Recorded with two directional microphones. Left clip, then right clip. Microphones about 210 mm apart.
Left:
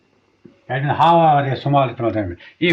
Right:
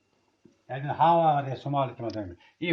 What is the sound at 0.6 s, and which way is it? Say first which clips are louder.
Speech: left 8 dB; 35° right (ahead or behind).